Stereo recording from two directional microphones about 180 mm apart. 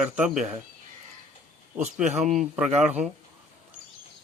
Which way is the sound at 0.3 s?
40° right (ahead or behind).